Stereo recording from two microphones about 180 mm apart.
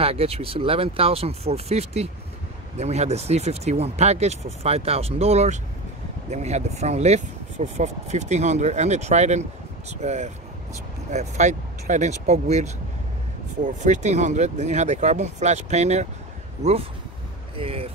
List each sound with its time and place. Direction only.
0.0 s speech: 35° right (ahead or behind)
17.6 s speech: 30° right (ahead or behind)